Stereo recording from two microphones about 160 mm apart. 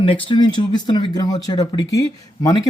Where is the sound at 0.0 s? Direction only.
35° left (ahead or behind).